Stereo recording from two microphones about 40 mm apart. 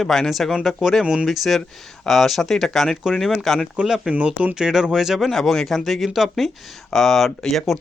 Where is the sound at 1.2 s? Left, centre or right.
Centre.